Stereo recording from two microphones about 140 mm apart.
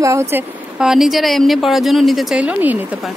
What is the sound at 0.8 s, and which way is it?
A woman's voice, 5° right (ahead or behind).